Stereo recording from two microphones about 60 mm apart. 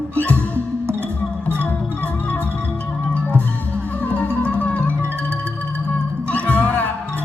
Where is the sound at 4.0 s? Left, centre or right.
Left.